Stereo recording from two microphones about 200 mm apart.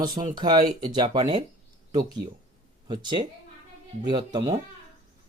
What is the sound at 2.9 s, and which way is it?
Speech, 25° right (ahead or behind).